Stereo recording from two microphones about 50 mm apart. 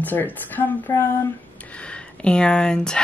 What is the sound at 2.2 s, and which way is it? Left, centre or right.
Speech, centre.